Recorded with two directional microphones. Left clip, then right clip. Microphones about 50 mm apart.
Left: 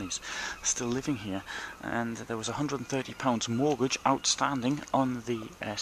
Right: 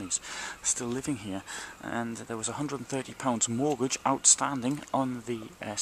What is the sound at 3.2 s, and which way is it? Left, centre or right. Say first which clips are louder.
Speech: left 1 dB; centre.